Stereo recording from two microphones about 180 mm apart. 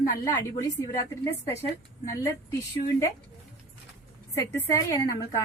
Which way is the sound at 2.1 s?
15° left (ahead or behind).